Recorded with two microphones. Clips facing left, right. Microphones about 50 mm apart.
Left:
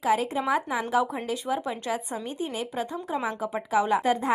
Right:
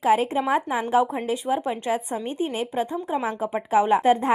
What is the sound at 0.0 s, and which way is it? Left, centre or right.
A woman's voice, right.